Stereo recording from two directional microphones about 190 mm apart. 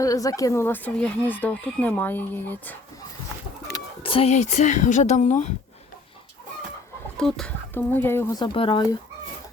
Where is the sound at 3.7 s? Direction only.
30° left (ahead or behind).